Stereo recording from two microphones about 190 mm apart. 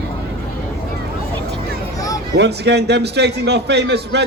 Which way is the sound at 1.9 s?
20° left (ahead or behind).